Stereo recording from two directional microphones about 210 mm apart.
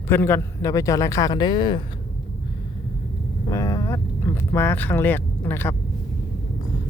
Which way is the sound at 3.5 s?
15° left (ahead or behind).